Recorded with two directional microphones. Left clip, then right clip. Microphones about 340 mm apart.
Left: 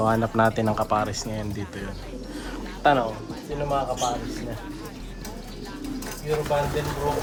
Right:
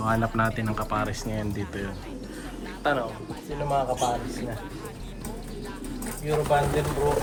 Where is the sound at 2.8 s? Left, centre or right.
Centre.